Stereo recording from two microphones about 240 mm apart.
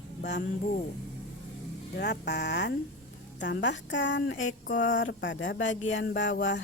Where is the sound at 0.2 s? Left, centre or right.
Left.